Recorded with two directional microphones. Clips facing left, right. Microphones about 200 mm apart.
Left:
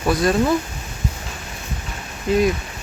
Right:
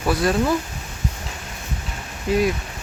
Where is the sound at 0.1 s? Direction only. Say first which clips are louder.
Left 2 dB; 5° right (ahead or behind).